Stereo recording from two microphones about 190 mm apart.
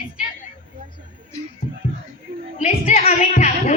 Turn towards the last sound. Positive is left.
turn(degrees=35)  # may be behind; listen again after turning